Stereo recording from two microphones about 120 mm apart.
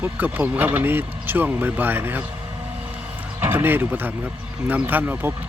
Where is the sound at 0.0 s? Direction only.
15° right (ahead or behind).